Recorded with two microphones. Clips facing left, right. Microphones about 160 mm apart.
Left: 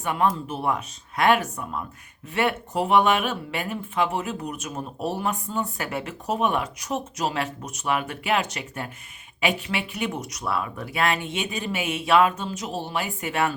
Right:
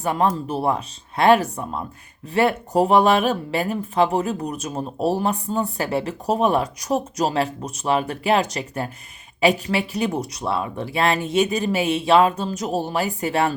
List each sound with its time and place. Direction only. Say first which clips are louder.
0.0 s speech: right 3 dB; 35° right (ahead or behind)